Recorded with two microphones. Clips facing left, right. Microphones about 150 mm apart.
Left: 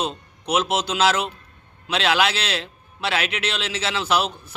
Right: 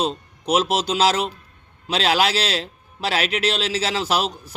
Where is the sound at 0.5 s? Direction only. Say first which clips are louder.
Right 2 dB; 35° right (ahead or behind).